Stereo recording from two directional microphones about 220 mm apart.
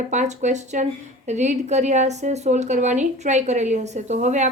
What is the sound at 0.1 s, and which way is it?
A woman's voice, 30° right (ahead or behind).